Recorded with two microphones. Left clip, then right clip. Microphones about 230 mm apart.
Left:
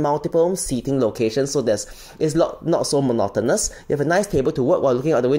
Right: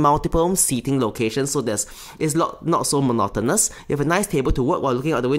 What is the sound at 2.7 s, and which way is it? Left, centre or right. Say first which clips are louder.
Speech: left 1 dB; right.